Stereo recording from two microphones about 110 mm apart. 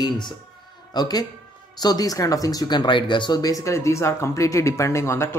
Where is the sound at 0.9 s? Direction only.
35° left (ahead or behind).